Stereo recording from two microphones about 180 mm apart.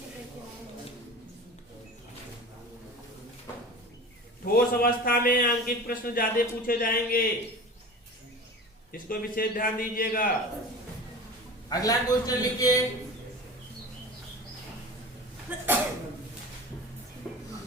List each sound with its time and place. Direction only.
4.5 s a man's voice: 55° left (ahead or behind)
8.9 s a man's voice: 50° left (ahead or behind)
11.7 s a man's voice: 20° left (ahead or behind)
15.4 s sneeze: 10° right (ahead or behind)
17.2 s music: 5° left (ahead or behind)